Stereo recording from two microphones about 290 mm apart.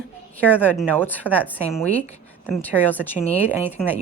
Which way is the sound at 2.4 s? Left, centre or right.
Centre.